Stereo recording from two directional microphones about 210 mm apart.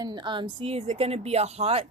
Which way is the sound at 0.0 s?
20° right (ahead or behind).